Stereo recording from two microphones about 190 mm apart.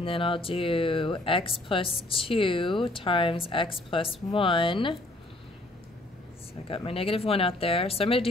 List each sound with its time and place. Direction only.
0.0 s speech: 30° left (ahead or behind)
6.7 s speech: 30° left (ahead or behind)